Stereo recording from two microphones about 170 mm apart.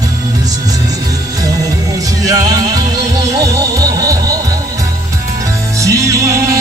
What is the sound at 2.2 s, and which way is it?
Music, 20° right (ahead or behind).